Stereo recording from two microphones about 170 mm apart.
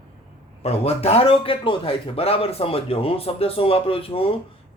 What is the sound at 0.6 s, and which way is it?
A man's voice, 35° left (ahead or behind).